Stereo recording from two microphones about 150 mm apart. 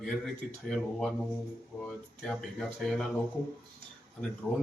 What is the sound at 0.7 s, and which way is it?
Speech, 5° left (ahead or behind).